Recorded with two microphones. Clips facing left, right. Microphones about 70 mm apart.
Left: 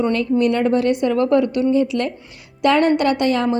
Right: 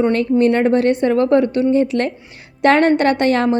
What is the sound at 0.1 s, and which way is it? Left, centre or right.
A woman's voice, right.